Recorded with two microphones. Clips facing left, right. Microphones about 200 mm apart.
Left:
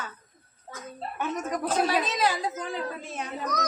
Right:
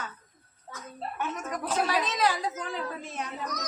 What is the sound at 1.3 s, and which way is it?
Speech, 35° left (ahead or behind).